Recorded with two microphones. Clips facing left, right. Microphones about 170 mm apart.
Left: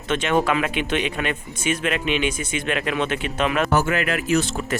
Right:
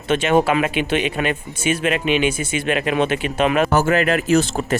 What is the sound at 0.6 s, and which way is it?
Speech, 5° right (ahead or behind).